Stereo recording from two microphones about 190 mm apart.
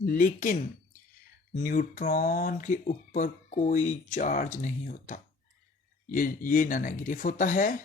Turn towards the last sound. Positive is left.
turn(degrees=45)  # may be behind; listen again after turning